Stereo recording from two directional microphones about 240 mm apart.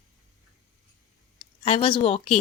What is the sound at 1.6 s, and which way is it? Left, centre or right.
Speech, left.